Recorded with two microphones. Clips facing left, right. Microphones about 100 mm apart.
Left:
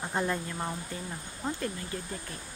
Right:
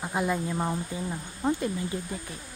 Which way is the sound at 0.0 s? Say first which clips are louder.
Right 3 dB; 5° right (ahead or behind).